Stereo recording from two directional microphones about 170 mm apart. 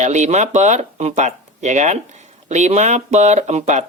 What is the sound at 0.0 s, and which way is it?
Speech, 45° right (ahead or behind).